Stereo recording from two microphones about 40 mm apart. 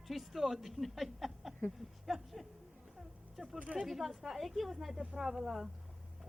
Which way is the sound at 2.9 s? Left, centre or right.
Centre.